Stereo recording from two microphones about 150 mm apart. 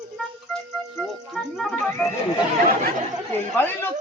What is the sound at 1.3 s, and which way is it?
Music, centre (ahead or behind).